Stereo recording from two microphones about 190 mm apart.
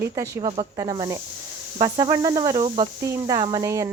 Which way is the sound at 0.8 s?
20° right (ahead or behind).